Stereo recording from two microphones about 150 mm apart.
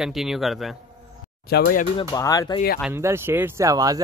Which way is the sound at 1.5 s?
70° left (ahead or behind).